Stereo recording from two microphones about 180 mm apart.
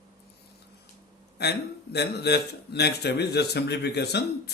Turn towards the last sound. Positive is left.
turn(degrees=65)  # may be behind; listen again after turning